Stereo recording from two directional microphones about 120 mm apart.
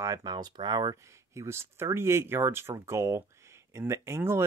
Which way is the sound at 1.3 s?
20° right (ahead or behind).